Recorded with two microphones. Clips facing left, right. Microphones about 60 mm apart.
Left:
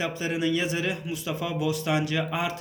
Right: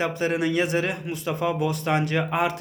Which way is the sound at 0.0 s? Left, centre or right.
Right.